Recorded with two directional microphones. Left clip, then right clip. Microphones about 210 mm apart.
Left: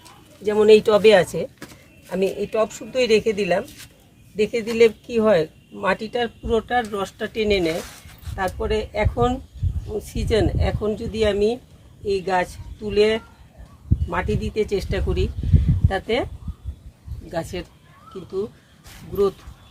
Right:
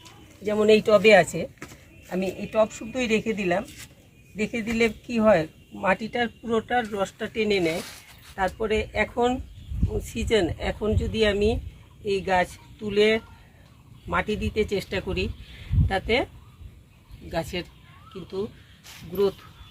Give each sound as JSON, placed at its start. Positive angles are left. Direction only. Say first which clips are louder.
{"t": 0.4, "sound": "speech", "louder": "left 5 dB", "side_deg": 25}
{"t": 2.1, "sound": "speech", "louder": "left 3 dB", "side_deg": 40}
{"t": 17.3, "sound": "speech", "louder": "left 1 dB", "side_deg": 20}